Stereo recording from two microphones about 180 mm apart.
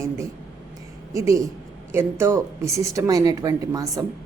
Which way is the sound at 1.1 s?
15° right (ahead or behind).